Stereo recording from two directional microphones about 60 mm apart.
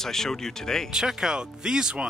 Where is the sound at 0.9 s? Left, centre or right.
Centre.